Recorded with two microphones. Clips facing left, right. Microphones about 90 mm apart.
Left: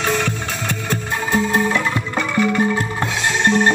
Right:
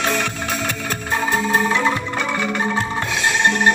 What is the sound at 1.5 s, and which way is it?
Music, 20° right (ahead or behind).